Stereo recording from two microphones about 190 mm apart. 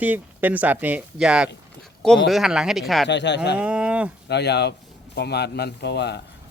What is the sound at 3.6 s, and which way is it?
Speech, 5° right (ahead or behind).